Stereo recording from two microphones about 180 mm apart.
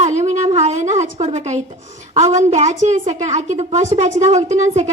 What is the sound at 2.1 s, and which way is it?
A woman's voice, 40° right (ahead or behind).